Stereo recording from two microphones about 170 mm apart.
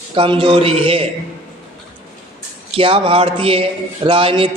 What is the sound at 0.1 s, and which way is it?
Speech, 30° right (ahead or behind).